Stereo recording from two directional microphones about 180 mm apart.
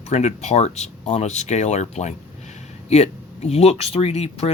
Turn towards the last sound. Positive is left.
turn(degrees=35)  # may be behind; listen again after turning